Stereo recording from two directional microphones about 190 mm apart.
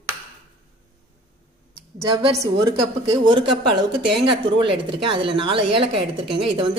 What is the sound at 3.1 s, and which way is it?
A woman's voice, 25° right (ahead or behind).